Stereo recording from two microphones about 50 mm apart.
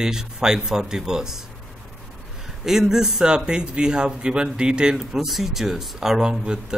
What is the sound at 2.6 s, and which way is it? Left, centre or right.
Speech, centre.